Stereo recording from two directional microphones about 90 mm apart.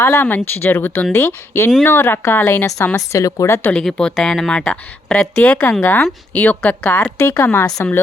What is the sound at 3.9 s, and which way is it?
Speech, 5° left (ahead or behind).